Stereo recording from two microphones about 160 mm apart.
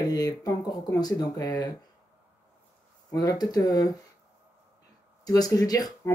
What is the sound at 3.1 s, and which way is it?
Speech, 25° left (ahead or behind).